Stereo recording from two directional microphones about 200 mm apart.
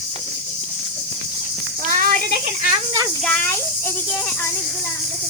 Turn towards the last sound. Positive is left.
turn(degrees=5)  # may be behind; listen again after turning